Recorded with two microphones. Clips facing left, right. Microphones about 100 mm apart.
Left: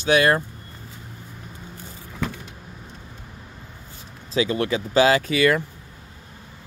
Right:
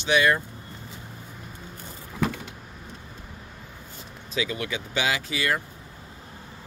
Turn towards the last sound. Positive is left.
turn(degrees=60)  # may be behind; listen again after turning